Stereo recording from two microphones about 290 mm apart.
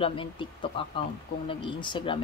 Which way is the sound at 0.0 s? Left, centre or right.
Centre.